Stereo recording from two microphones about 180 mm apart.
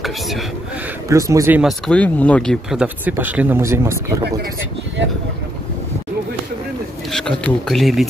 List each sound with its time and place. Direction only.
0.0 s speech: centre (ahead or behind)
1.0 s speech: 20° right (ahead or behind)
1.6 s speech: centre (ahead or behind); by 4.0 s 15° right (ahead or behind)
7.1 s speech: 5° left (ahead or behind)